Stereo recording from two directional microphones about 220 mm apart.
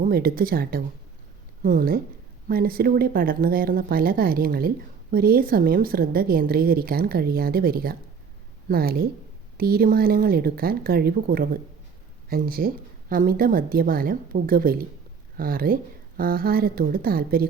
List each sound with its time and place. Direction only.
0.0 s a woman's voice: 40° right (ahead or behind)